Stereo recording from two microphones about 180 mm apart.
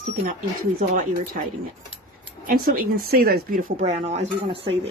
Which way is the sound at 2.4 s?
50° right (ahead or behind).